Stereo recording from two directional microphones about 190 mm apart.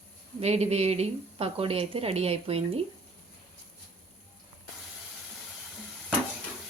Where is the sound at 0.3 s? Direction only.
35° right (ahead or behind).